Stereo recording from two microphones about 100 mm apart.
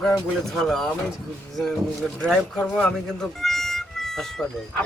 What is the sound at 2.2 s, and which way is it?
Speech, 10° left (ahead or behind).